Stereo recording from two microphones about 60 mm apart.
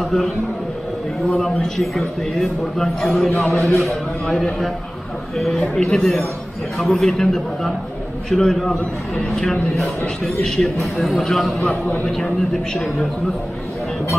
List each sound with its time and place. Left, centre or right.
0.0 s a man's voice: centre
1.4 s a man's voice: centre
3.3 s a man's voice: left
3.5 s a man's voice: centre
10.8 s a man's voice: centre